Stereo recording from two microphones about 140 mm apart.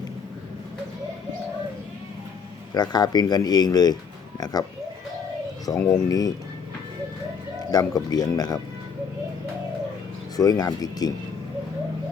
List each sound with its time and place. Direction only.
2.7 s speech: 30° left (ahead or behind)
5.6 s speech: 25° left (ahead or behind)
7.7 s speech: 30° left (ahead or behind)
10.3 s speech: 25° left (ahead or behind)